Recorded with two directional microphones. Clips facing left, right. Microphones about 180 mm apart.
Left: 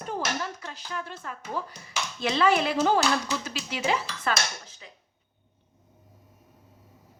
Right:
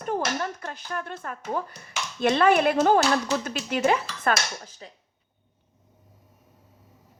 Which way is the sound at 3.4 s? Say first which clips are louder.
Right 6 dB; 55° right (ahead or behind).